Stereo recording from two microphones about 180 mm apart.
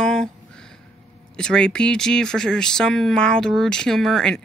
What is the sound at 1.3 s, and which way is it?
Speech, 5° left (ahead or behind).